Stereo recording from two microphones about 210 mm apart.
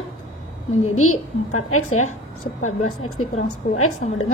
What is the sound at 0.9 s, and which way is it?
A woman's voice, 90° left.